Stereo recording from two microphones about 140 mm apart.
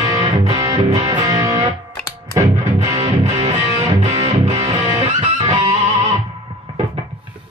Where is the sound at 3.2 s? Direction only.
50° right (ahead or behind).